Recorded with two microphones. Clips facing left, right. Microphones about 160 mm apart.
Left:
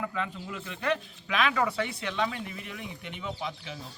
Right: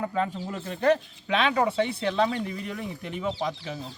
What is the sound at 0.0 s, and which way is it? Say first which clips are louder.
Speech: right 6 dB; 40° right (ahead or behind).